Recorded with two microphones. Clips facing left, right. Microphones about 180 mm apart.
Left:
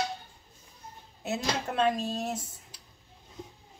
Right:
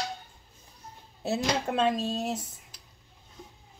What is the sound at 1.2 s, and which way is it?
Speech, 30° right (ahead or behind).